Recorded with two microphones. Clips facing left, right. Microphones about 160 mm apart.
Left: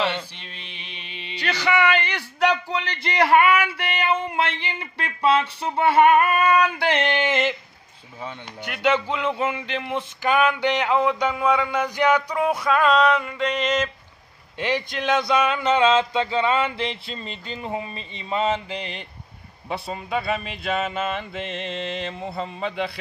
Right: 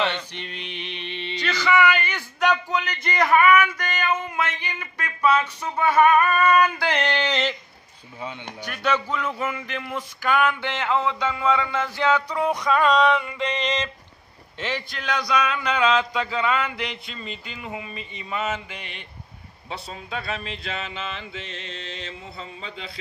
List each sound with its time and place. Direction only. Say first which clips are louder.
0.0 s mantra: even; 5° left (ahead or behind)
1.6 s a man's voice: right 1 dB; 30° left (ahead or behind)
6.9 s speech: left 2 dB; 20° left (ahead or behind)
8.9 s a sound: left 2 dB; 25° left (ahead or behind); by 13.8 s centre (ahead or behind)
14.6 s speech: left 5 dB; 20° left (ahead or behind); by 19.0 s 35° left (ahead or behind)
20.6 s mantra: left 7 dB; 55° left (ahead or behind)